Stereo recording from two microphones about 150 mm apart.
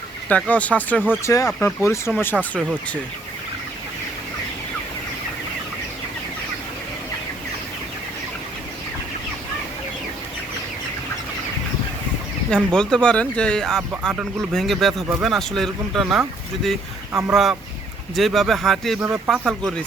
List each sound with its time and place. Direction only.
0.3 s speech: 10° left (ahead or behind)
1.2 s speech: 20° left (ahead or behind)
12.7 s speech: 5° left (ahead or behind)
17.1 s speech: 15° right (ahead or behind)
17.3 s speech: centre (ahead or behind)
19.0 s speech: 15° right (ahead or behind)
19.3 s speech: centre (ahead or behind)